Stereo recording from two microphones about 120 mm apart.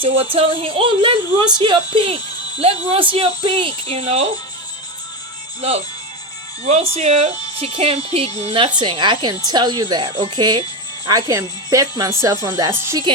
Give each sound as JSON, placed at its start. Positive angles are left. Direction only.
{"t": 0.0, "sound": "speech", "side_deg": -50}
{"t": 2.6, "sound": "speech", "side_deg": -55}
{"t": 6.9, "sound": "speech", "side_deg": -60}
{"t": 8.8, "sound": "speech", "side_deg": -40}
{"t": 11.0, "sound": "speech", "side_deg": -30}